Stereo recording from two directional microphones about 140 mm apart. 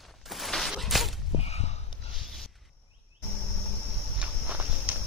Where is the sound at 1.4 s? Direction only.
50° left (ahead or behind).